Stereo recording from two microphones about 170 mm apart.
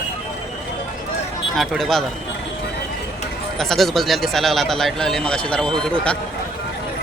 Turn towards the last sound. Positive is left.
turn(degrees=5)  # may be behind; listen again after turning